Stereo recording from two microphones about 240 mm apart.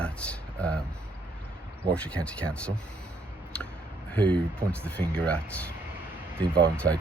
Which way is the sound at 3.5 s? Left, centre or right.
Centre.